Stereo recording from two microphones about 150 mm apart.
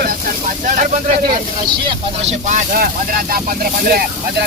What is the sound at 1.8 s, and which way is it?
Speech, 45° right (ahead or behind).